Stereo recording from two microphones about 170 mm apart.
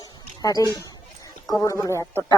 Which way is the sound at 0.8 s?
20° left (ahead or behind).